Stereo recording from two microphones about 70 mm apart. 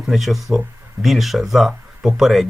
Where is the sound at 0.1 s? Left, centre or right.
Centre.